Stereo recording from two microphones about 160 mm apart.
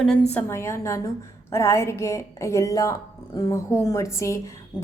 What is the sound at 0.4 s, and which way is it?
A woman's voice, 15° left (ahead or behind).